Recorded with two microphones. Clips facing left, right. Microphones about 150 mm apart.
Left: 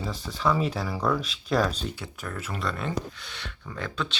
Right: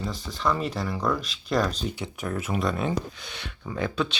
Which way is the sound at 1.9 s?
20° right (ahead or behind).